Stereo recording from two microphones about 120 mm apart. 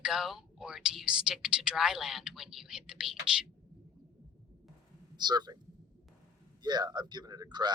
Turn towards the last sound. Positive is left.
turn(degrees=-35)  # may be behind; listen again after turning